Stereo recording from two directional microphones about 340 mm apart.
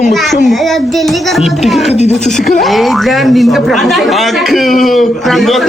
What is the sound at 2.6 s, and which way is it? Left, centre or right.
Speech, centre.